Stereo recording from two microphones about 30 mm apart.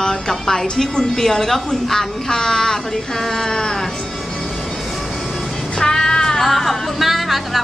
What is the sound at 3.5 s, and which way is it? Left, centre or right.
Speech, left.